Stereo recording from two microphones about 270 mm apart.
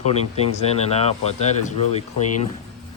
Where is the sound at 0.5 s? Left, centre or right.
Left.